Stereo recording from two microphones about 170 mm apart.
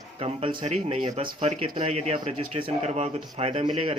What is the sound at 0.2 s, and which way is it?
Speech, 35° right (ahead or behind).